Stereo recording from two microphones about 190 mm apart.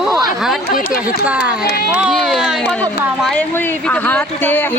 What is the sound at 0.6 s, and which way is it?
Speech, 50° left (ahead or behind).